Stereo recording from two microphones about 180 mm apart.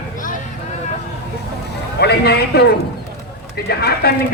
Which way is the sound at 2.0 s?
65° left (ahead or behind).